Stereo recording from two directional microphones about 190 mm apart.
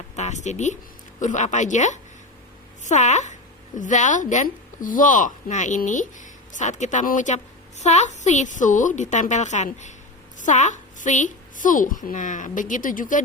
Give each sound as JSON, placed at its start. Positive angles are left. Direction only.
{"t": 0.2, "sound": "a woman's voice", "side_deg": 40}